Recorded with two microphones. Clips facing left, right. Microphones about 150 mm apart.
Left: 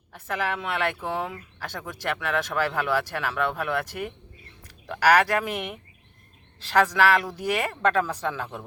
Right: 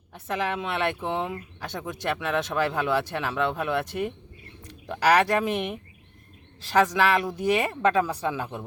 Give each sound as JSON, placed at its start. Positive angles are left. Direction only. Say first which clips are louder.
{"t": 0.1, "sound": "speech", "louder": "right 1 dB", "side_deg": -20}